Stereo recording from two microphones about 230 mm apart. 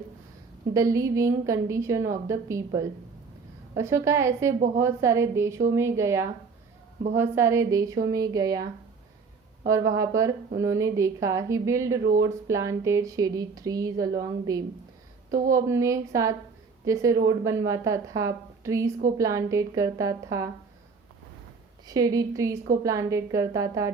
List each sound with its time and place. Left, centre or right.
0.7 s speech: centre
9.6 s speech: centre
21.8 s speech: centre